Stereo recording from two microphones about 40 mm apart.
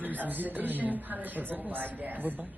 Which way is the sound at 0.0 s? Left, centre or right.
Right.